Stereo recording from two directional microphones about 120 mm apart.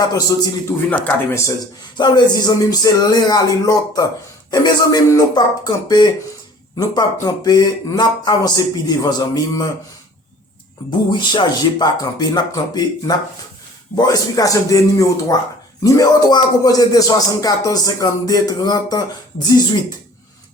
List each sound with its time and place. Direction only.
0.1 s a man's voice: 30° left (ahead or behind)
0.9 s speech: 15° left (ahead or behind)
2.0 s music: 35° left (ahead or behind)
11.1 s music: 40° left (ahead or behind)